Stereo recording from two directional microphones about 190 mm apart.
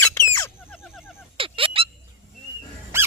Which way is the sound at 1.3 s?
30° right (ahead or behind).